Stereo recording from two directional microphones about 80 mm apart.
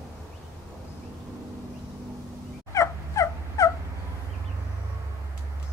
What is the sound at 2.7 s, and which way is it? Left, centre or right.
Fowl, left.